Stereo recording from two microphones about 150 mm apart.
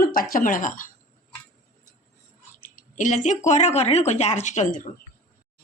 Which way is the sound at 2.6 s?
60° left (ahead or behind).